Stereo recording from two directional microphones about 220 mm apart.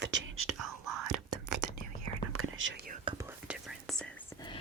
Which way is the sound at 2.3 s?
70° right (ahead or behind).